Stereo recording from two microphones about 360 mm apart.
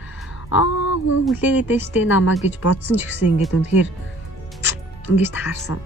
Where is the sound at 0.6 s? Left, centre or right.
Left.